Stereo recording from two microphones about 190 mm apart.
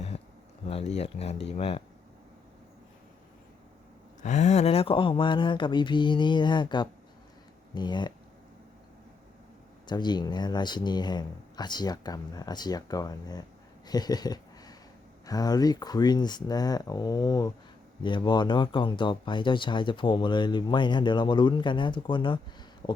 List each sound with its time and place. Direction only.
0.7 s speech: 35° left (ahead or behind)
4.2 s speech: 40° left (ahead or behind); by 8.1 s 25° left (ahead or behind)
9.8 s speech: 20° left (ahead or behind)
13.8 s a sound: 20° left (ahead or behind)
15.3 s speech: 20° left (ahead or behind)